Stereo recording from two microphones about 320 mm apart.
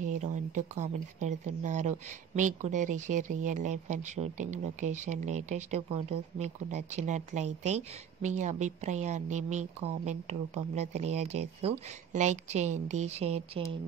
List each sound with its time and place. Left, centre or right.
0.1 s speech: right